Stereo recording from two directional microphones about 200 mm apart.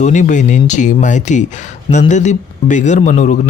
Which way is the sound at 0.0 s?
40° left (ahead or behind).